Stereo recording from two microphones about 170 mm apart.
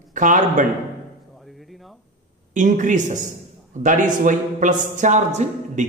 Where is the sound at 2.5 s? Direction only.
50° right (ahead or behind).